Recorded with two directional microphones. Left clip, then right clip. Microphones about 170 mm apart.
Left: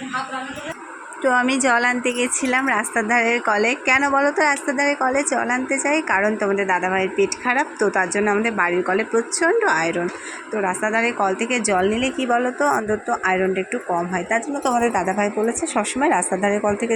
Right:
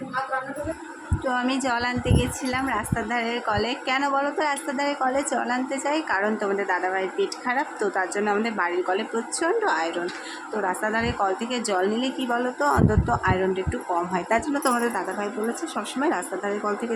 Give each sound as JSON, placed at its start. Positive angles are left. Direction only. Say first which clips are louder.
{"t": 1.2, "sound": "a woman's voice", "louder": "left 7 dB", "side_deg": 25}
{"t": 14.1, "sound": "speech", "louder": "left 2 dB", "side_deg": 0}
{"t": 14.8, "sound": "a woman's voice", "louder": "left 7 dB", "side_deg": 25}